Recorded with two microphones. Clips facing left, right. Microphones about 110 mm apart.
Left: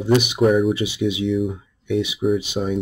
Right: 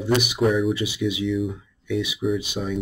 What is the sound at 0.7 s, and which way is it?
Speech, 25° left (ahead or behind).